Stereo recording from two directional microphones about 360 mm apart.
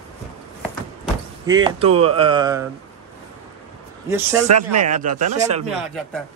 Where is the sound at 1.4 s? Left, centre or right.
Centre.